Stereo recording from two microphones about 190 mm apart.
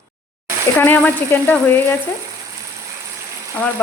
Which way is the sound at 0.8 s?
10° left (ahead or behind).